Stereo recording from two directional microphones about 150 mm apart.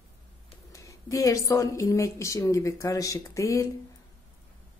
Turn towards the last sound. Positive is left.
turn(degrees=20)  # may be behind; listen again after turning